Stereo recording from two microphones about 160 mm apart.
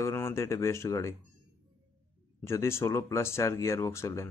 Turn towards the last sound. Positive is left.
turn(degrees=20)  # may be behind; listen again after turning